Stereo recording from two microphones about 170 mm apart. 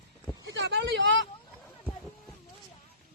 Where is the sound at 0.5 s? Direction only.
90° right.